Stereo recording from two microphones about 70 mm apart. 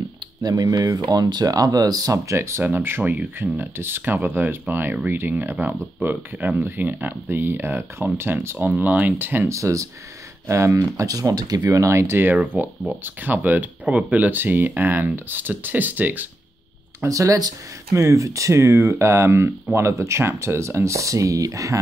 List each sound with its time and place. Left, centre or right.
0.4 s speech: right
2.1 s speech: right
2.6 s speech: right
9.5 s speech: right
17.1 s speech: right
17.9 s speech: right